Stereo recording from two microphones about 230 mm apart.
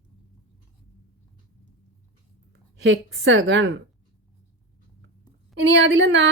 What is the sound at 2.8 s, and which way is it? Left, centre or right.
Speech, right.